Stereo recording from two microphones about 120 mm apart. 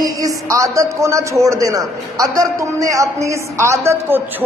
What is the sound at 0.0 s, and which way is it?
A man's voice, 30° right (ahead or behind).